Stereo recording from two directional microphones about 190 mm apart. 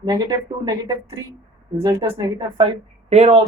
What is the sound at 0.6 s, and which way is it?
Speech, 20° right (ahead or behind).